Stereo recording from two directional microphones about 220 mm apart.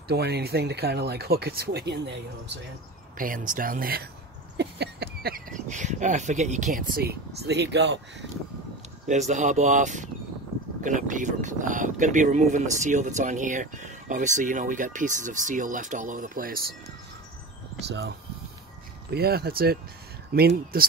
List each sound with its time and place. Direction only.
0.1 s speech: 45° right (ahead or behind)
3.2 s speech: 40° right (ahead or behind)
9.0 s speech: 35° right (ahead or behind)
17.7 s speech: 50° right (ahead or behind)